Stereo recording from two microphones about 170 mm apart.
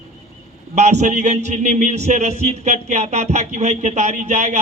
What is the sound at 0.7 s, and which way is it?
A man's voice, 40° right (ahead or behind).